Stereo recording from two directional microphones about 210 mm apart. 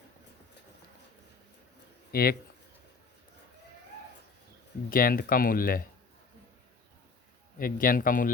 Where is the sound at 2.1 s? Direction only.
45° left (ahead or behind).